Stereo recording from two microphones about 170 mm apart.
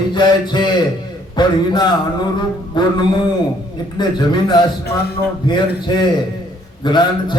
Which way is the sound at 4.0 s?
25° left (ahead or behind).